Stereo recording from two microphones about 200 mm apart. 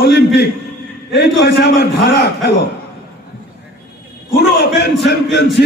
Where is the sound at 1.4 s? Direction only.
55° left (ahead or behind).